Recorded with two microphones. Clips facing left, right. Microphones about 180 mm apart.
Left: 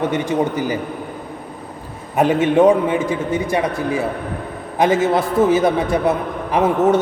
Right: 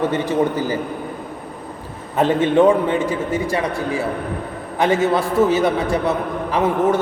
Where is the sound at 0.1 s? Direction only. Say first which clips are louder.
Even; 15° left (ahead or behind).